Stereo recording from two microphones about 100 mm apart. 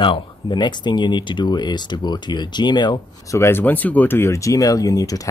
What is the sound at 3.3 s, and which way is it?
Speech, 25° left (ahead or behind).